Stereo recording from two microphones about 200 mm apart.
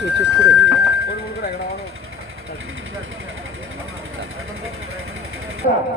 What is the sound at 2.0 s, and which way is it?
Vehicle, 90° right.